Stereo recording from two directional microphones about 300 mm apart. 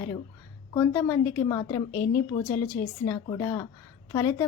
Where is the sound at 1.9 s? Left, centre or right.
Left.